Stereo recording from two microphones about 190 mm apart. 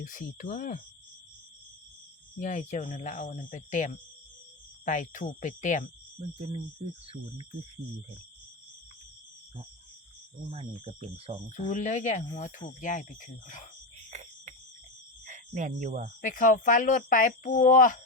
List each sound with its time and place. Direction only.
0.0 s speech: 45° left (ahead or behind)
2.4 s speech: 40° left (ahead or behind)
10.5 s cricket: 30° right (ahead or behind)
11.6 s speech: 40° left (ahead or behind)
14.1 s cricket: 35° right (ahead or behind)
15.3 s speech: 40° right (ahead or behind)
16.2 s speech: 45° left (ahead or behind)